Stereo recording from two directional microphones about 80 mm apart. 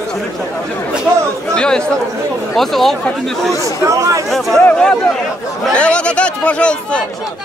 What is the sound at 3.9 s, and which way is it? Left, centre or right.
Speech, right.